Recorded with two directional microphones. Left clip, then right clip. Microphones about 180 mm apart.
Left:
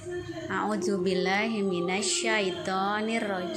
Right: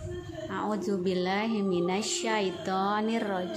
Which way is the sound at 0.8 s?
20° right (ahead or behind).